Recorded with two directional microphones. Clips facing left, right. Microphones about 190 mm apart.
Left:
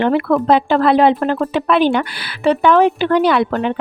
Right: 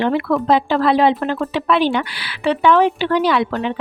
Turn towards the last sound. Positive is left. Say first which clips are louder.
# left 3 dB
turn(degrees=45)  # may be behind; listen again after turning